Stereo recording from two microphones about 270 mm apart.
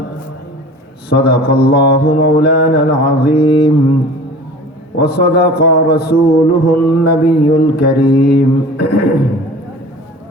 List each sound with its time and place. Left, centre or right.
1.1 s mantra: left
4.9 s mantra: left